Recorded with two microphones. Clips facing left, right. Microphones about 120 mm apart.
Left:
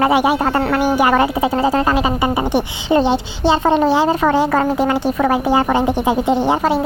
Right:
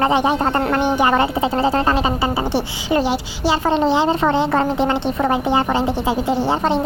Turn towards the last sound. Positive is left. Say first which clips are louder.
# left 2 dB
turn(degrees=10)  # may be behind; listen again after turning